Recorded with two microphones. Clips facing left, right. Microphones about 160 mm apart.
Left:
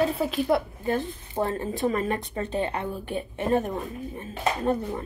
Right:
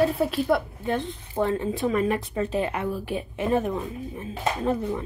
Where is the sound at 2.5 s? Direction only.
30° left (ahead or behind).